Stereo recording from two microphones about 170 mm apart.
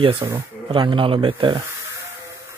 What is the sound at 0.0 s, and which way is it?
Speech, 30° right (ahead or behind).